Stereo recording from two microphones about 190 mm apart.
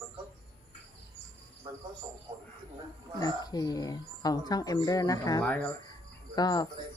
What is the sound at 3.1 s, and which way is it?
Speech, 20° left (ahead or behind).